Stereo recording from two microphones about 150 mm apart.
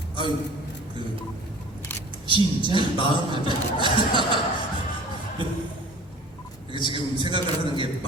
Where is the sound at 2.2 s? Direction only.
35° right (ahead or behind).